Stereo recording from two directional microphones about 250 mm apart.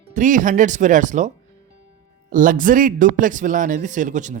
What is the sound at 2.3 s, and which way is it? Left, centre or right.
A man's voice, right.